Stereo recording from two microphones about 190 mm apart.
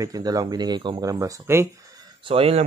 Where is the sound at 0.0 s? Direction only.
20° right (ahead or behind).